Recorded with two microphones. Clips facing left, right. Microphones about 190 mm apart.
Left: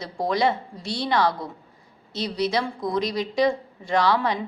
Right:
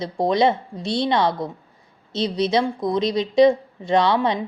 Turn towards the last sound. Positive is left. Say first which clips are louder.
# right 3 dB
turn(degrees=-20)  # may be behind; listen again after turning